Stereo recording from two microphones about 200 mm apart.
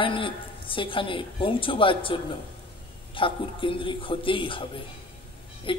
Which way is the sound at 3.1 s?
25° left (ahead or behind).